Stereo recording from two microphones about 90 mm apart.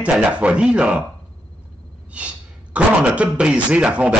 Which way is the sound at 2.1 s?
15° right (ahead or behind).